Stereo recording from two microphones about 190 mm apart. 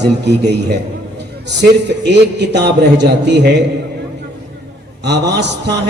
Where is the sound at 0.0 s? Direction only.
65° right (ahead or behind).